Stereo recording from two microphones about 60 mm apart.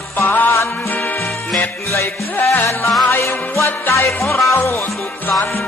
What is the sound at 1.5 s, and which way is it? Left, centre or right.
Music, left.